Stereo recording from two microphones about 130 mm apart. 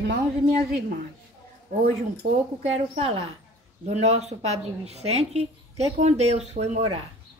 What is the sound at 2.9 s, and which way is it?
A woman's voice, 50° right (ahead or behind).